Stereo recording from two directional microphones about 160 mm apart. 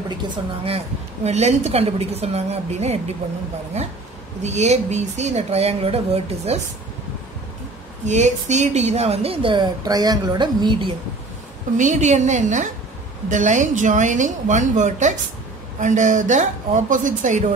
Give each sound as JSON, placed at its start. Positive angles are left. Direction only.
{"t": 0.7, "sound": "speech", "side_deg": -40}
{"t": 8.0, "sound": "speech", "side_deg": -45}
{"t": 11.7, "sound": "speech", "side_deg": -50}